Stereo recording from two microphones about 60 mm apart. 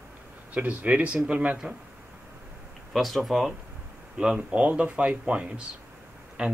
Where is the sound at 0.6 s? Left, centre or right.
Right.